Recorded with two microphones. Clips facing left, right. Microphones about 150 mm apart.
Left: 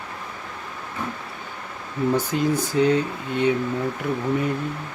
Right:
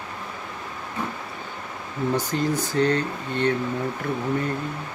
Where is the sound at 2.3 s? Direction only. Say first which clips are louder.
Left 2 dB; 10° left (ahead or behind).